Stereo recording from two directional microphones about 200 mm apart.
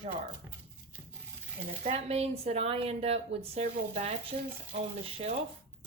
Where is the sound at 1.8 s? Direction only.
35° right (ahead or behind).